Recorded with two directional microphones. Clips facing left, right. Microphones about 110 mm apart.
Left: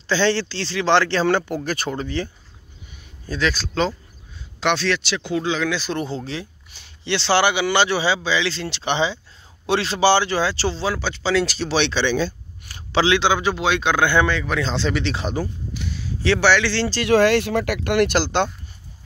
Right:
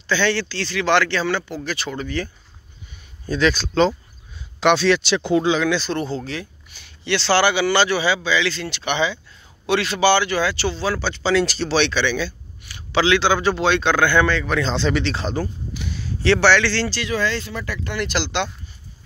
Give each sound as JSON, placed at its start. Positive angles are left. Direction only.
{"t": 0.0, "sound": "speech", "side_deg": 30}
{"t": 1.2, "sound": "speech", "side_deg": 45}
{"t": 2.0, "sound": "speech", "side_deg": 25}
{"t": 3.3, "sound": "speech", "side_deg": 0}
{"t": 5.0, "sound": "speech", "side_deg": -30}
{"t": 5.7, "sound": "speech", "side_deg": 10}
{"t": 10.9, "sound": "a man's voice", "side_deg": 10}
{"t": 11.7, "sound": "speech", "side_deg": 25}
{"t": 12.9, "sound": "a man's voice", "side_deg": 25}
{"t": 14.4, "sound": "speech", "side_deg": 5}
{"t": 15.1, "sound": "a man's voice", "side_deg": 10}
{"t": 15.7, "sound": "speech", "side_deg": 0}
{"t": 17.0, "sound": "speech", "side_deg": 65}
{"t": 18.2, "sound": "speech", "side_deg": 45}